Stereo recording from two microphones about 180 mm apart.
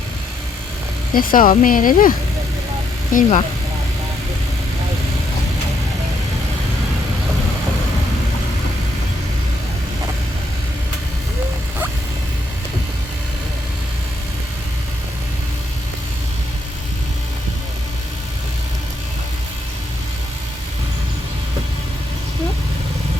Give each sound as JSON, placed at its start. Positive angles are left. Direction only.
{"t": 1.1, "sound": "a woman's voice", "side_deg": 50}